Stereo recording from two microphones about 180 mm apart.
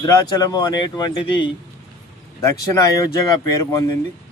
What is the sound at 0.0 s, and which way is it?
Speech, 20° left (ahead or behind).